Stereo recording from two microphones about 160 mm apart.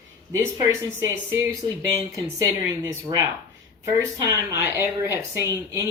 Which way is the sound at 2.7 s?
20° right (ahead or behind).